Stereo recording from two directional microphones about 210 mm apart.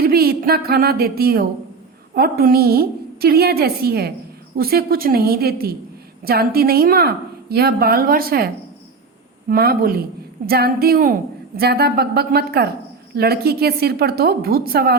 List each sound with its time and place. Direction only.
0.0 s a woman's voice: 45° right (ahead or behind)
9.5 s a woman's voice: 45° right (ahead or behind)